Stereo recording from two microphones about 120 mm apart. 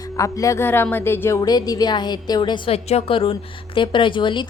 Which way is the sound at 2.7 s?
55° left (ahead or behind).